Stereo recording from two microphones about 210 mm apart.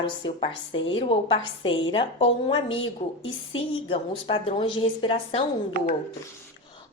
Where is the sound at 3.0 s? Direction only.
40° left (ahead or behind).